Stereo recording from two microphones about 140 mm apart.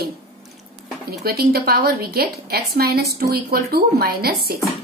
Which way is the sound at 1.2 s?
90° right.